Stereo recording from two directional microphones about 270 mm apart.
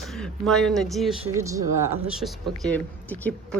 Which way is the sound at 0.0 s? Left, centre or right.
Centre.